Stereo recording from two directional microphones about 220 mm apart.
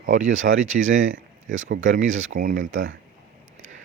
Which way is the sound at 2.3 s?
40° right (ahead or behind).